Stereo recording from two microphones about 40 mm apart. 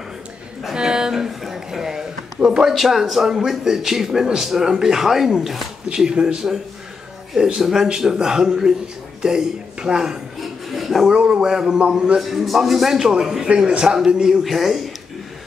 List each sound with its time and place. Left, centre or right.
0.7 s a sound: centre
2.7 s a man's voice: centre
10.4 s a sound: centre
11.1 s a man's voice: right
12.2 s a man's voice: centre
13.0 s a man's voice: centre
13.5 s a man's voice: right
14.4 s a man's voice: centre